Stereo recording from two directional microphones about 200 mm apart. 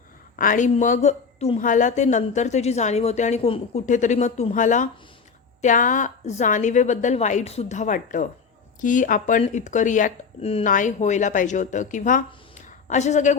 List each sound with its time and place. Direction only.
0.3 s a woman's voice: 40° left (ahead or behind)